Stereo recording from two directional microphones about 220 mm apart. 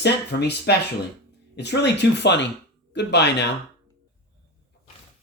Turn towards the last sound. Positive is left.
turn(degrees=50)  # may be behind; listen again after turning